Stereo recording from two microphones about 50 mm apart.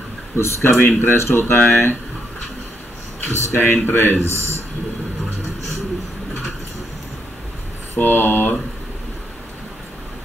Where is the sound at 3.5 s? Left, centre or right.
Left.